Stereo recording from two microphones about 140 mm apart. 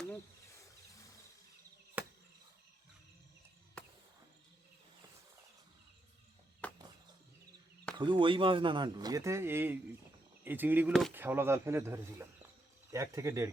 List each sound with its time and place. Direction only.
2.0 s chop: 10° right (ahead or behind)
3.8 s cricket: 10° left (ahead or behind)
6.6 s chop: 10° left (ahead or behind)
7.9 s speech: 35° right (ahead or behind)